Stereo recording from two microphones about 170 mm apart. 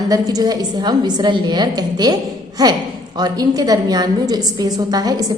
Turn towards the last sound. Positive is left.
turn(degrees=-20)  # may be behind; listen again after turning